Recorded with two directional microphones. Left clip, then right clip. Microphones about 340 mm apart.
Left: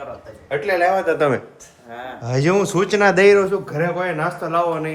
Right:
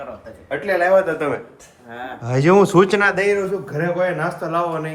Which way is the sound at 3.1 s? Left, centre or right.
Left.